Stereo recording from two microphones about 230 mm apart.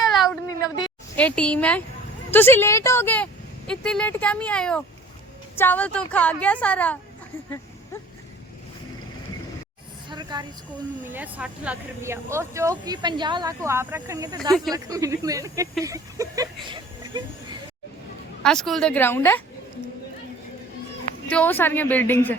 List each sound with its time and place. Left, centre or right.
0.4 s a sound: centre
2.3 s a woman's voice: centre
10.1 s a sound: centre
11.0 s speech: centre
18.4 s speech: centre
21.2 s a woman's voice: centre